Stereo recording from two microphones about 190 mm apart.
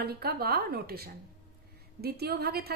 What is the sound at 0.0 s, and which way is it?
A woman's voice, 55° right (ahead or behind).